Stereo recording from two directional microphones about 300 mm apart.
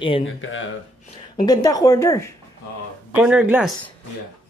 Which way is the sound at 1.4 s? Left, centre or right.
Centre.